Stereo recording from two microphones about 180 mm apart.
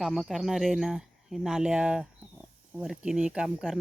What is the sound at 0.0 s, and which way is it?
Speech, 5° right (ahead or behind).